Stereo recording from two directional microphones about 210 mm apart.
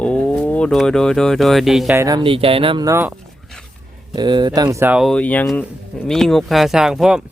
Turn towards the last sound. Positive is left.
turn(degrees=-5)  # may be behind; listen again after turning